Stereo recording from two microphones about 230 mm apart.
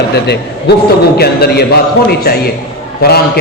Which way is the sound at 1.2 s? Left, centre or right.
Left.